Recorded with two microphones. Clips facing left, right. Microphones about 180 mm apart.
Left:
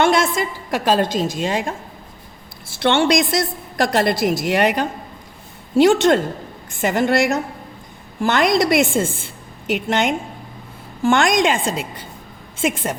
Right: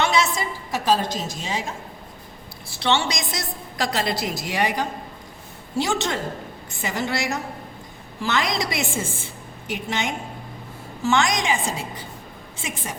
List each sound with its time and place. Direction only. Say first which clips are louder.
0.0 s a woman's voice: left 5 dB; 50° left (ahead or behind)
0.3 s a woman's voice: left 5 dB; 65° left (ahead or behind)
2.8 s a woman's voice: left 7 dB; 55° left (ahead or behind)
9.7 s a woman's voice: left 8 dB; 70° left (ahead or behind)
11.0 s a woman's voice: left 6 dB; 55° left (ahead or behind)